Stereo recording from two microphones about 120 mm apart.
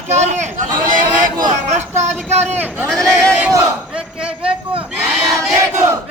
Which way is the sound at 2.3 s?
65° right (ahead or behind).